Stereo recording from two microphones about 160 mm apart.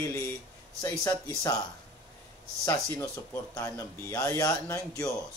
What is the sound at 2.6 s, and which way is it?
A man's voice, 15° left (ahead or behind).